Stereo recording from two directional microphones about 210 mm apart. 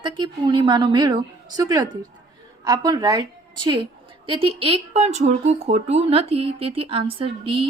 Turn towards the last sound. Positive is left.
turn(degrees=-25)  # may be behind; listen again after turning